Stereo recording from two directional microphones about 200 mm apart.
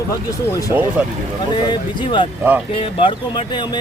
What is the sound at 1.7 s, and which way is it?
Speech, 25° left (ahead or behind).